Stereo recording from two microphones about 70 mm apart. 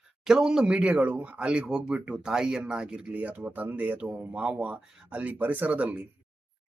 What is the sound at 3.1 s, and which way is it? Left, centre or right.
Speech, right.